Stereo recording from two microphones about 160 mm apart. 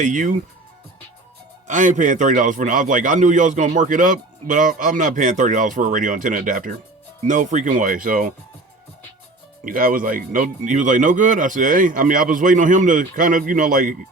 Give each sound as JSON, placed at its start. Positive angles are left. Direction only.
{"t": 0.0, "sound": "a man's voice", "side_deg": -50}
{"t": 1.6, "sound": "a man's voice", "side_deg": -50}
{"t": 9.6, "sound": "speech", "side_deg": -60}